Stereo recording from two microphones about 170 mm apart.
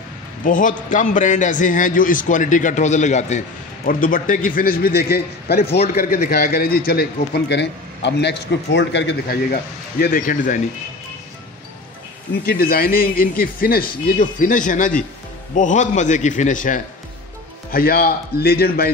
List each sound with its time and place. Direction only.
0.4 s a man's voice: 50° left (ahead or behind)
3.8 s a man's voice: 55° left (ahead or behind); by 5.8 s 70° left (ahead or behind)
5.9 s a man's voice: 55° left (ahead or behind)
12.4 s a man's voice: 65° left (ahead or behind)
17.6 s a man's voice: 60° left (ahead or behind)